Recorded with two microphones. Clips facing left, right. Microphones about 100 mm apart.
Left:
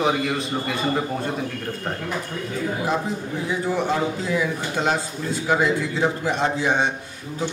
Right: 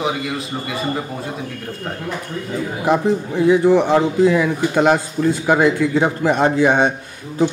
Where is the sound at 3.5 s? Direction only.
70° right (ahead or behind).